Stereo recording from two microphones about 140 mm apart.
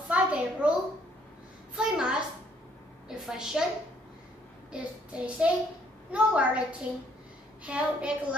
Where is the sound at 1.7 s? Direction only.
5° right (ahead or behind).